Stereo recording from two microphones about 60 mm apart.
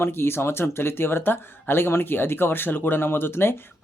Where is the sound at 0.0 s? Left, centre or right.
Left.